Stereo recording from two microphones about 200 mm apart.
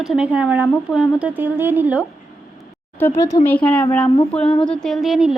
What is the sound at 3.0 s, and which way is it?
A woman's voice, 10° left (ahead or behind).